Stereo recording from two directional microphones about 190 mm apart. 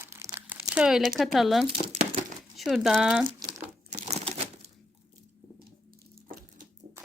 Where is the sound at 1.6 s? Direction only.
30° right (ahead or behind).